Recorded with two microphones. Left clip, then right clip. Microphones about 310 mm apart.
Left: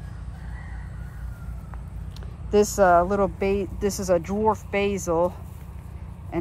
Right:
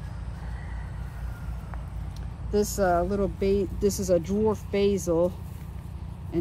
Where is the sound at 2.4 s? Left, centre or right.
Centre.